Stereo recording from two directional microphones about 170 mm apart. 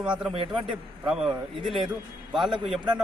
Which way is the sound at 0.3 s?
30° right (ahead or behind).